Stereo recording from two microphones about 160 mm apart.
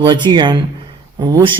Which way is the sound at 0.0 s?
30° right (ahead or behind).